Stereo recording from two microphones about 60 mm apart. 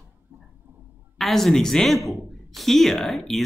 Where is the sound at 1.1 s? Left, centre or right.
Centre.